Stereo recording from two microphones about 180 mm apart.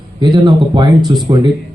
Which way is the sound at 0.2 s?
25° right (ahead or behind).